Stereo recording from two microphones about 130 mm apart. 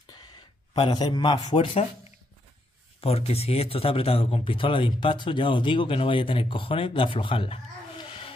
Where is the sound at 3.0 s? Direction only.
50° left (ahead or behind).